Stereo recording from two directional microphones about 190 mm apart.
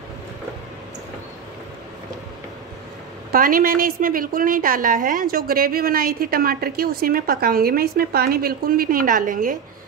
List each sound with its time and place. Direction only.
3.3 s a woman's voice: 45° right (ahead or behind)